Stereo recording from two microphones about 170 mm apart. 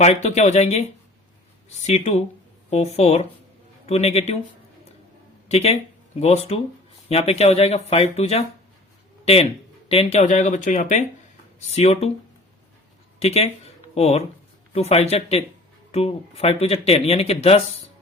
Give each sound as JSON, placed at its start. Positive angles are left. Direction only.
{"t": 0.0, "sound": "speech", "side_deg": 40}
{"t": 1.9, "sound": "speech", "side_deg": 40}
{"t": 5.5, "sound": "speech", "side_deg": 40}
{"t": 13.1, "sound": "speech", "side_deg": 40}